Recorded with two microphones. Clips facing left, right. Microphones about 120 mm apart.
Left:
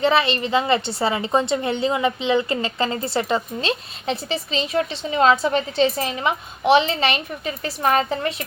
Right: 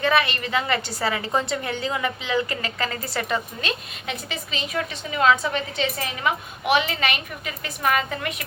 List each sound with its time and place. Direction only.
0.0 s a woman's voice: 25° left (ahead or behind)